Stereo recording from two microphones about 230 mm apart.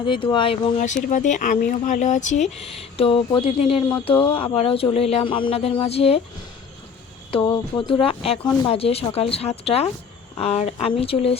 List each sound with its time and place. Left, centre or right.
0.0 s speech: left
1.1 s speech: left
7.3 s speech: left